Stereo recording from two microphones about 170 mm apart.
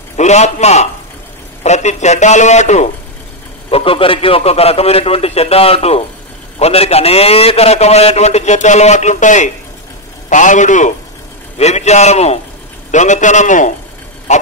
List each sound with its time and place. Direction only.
0.2 s a man's voice: 40° left (ahead or behind)
3.7 s a man's voice: 35° left (ahead or behind)
14.3 s a sound: 45° left (ahead or behind)